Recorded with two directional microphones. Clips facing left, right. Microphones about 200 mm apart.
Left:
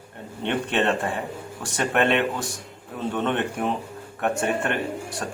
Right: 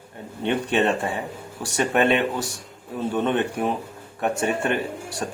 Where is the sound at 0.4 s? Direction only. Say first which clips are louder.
Right 2 dB; 10° right (ahead or behind).